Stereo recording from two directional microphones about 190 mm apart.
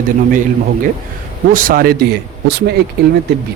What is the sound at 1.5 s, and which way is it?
Speech, 45° right (ahead or behind).